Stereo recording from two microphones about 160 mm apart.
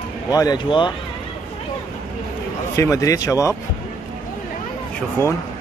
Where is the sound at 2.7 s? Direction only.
20° left (ahead or behind).